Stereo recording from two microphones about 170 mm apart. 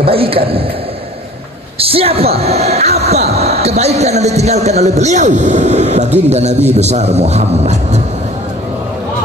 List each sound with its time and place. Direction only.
0.0 s a man's voice: 35° right (ahead or behind)
1.8 s a man's voice: 35° right (ahead or behind)